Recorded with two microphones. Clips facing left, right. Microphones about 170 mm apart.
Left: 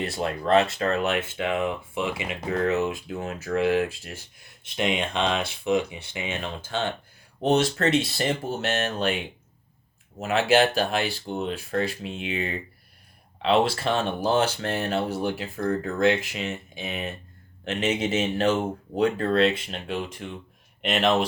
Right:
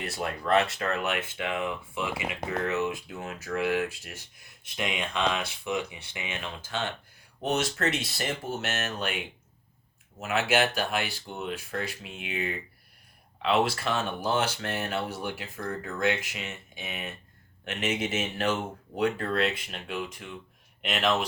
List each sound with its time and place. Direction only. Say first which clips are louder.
0.0 s speech: left 5 dB; 25° left (ahead or behind)